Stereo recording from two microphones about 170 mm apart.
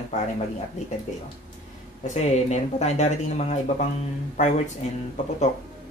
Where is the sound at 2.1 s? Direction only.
40° left (ahead or behind).